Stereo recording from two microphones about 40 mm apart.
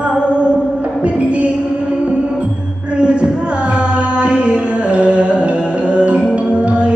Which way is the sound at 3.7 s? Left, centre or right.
Right.